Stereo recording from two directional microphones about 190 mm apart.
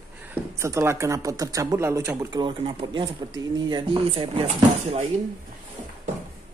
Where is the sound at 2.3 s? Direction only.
25° right (ahead or behind).